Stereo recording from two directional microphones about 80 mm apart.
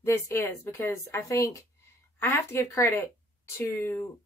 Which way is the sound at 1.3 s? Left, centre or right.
Left.